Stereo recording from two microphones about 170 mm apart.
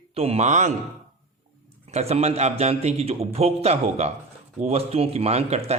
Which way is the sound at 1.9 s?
40° right (ahead or behind).